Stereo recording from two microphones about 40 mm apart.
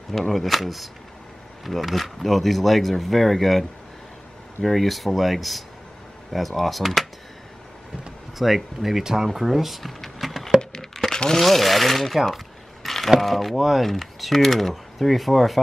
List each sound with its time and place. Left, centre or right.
0.3 s speech: centre
4.6 s speech: centre
8.4 s speech: centre
10.6 s a sound: centre
11.3 s speech: centre
12.8 s a sound: centre
13.2 s speech: centre